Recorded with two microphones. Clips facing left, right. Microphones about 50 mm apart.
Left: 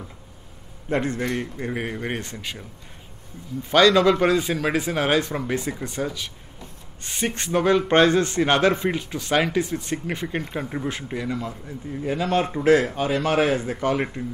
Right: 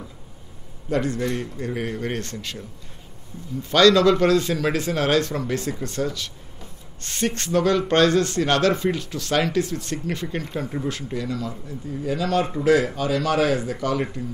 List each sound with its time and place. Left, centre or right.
0.8 s a man's voice: left
3.7 s a man's voice: centre